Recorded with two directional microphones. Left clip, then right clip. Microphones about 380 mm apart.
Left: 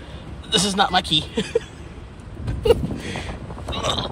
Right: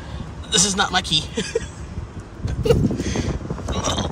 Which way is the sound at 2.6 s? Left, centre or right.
Centre.